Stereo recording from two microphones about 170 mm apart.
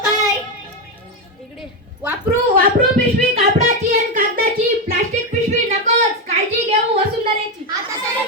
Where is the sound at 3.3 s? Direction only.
45° right (ahead or behind).